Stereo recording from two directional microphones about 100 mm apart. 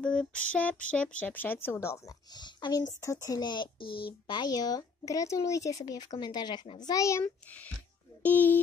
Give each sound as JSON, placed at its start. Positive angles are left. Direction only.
{"t": 0.0, "sound": "speech", "side_deg": 10}
{"t": 2.3, "sound": "speech", "side_deg": 45}
{"t": 8.2, "sound": "speech", "side_deg": 20}